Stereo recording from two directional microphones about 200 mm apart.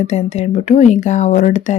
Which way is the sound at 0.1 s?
35° left (ahead or behind).